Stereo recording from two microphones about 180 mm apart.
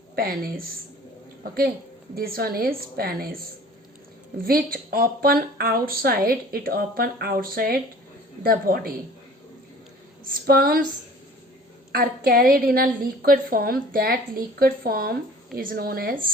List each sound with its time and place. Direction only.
0.2 s speech: 55° right (ahead or behind)
2.1 s speech: 55° right (ahead or behind)
4.4 s speech: 55° right (ahead or behind)
10.2 s speech: 55° right (ahead or behind)
11.9 s speech: 55° right (ahead or behind)